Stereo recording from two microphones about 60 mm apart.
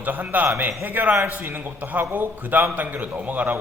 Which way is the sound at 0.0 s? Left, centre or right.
Right.